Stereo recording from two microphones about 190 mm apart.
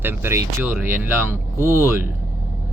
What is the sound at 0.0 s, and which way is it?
Speech, 10° right (ahead or behind).